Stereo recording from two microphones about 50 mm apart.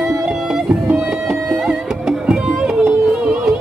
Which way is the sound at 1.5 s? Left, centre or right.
Centre.